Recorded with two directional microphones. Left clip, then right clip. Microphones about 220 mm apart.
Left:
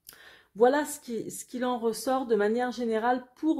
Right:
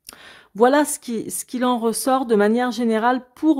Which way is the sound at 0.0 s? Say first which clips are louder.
Right 9 dB; 35° right (ahead or behind).